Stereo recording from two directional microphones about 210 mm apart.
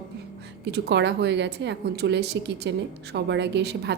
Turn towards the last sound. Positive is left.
turn(degrees=-55)  # may be behind; listen again after turning